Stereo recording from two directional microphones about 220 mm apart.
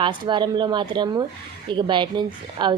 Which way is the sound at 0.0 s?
20° right (ahead or behind).